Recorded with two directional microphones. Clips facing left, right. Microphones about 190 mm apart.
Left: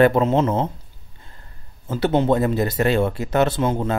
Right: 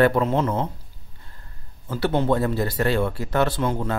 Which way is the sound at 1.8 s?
20° left (ahead or behind).